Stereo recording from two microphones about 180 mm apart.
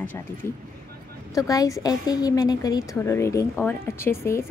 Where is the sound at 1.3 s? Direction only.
20° left (ahead or behind).